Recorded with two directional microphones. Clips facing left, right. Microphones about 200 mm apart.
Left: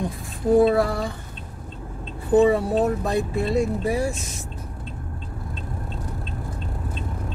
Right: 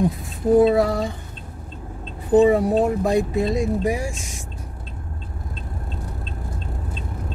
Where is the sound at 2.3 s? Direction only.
15° right (ahead or behind).